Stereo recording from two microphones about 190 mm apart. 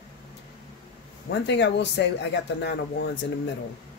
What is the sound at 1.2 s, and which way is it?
Speech, 65° left (ahead or behind).